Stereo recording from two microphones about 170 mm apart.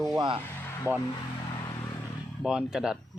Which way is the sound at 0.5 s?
15° left (ahead or behind).